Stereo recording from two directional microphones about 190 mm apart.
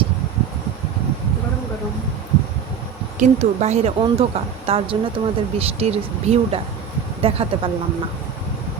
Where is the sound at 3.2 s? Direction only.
35° right (ahead or behind).